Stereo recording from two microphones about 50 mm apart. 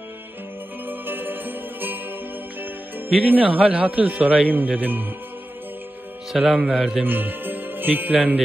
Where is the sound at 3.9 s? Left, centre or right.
Right.